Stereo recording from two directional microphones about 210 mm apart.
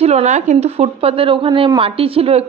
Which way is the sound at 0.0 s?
30° right (ahead or behind).